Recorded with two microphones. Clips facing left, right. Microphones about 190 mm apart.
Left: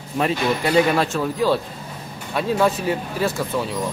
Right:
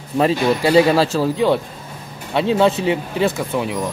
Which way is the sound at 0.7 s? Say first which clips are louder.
Right 4 dB; 30° right (ahead or behind).